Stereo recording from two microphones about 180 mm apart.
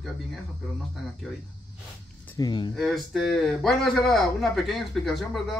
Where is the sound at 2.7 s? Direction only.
Centre (ahead or behind).